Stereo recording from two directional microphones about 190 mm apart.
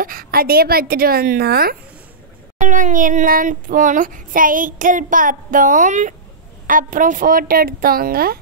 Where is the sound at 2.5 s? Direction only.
40° right (ahead or behind).